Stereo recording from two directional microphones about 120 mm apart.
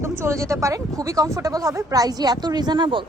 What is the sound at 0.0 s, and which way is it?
Speech, 20° right (ahead or behind).